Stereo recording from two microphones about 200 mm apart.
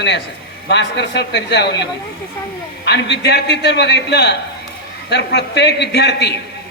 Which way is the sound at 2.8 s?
55° left (ahead or behind).